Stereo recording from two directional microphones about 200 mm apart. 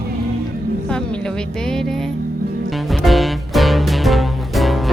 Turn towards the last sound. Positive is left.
turn(degrees=0)  # may be behind; listen again after turning